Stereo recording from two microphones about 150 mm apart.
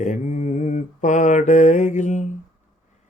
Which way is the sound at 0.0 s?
55° left (ahead or behind).